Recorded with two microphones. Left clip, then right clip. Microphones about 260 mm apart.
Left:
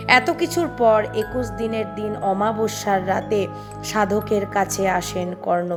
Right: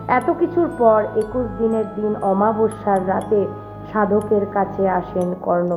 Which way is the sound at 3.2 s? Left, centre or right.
Centre.